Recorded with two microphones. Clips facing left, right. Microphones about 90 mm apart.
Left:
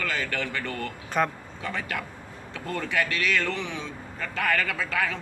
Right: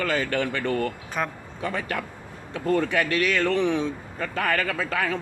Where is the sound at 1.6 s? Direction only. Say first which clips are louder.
Right 4 dB; 30° right (ahead or behind); by 3.9 s 50° right (ahead or behind).